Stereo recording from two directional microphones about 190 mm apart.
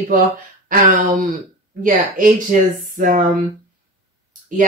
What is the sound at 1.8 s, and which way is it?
Speech, 45° right (ahead or behind).